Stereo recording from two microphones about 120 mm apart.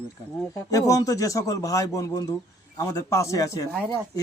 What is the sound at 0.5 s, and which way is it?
A man's voice, 30° left (ahead or behind).